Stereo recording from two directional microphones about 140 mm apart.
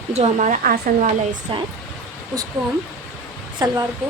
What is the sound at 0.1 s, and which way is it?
Speech, 55° right (ahead or behind).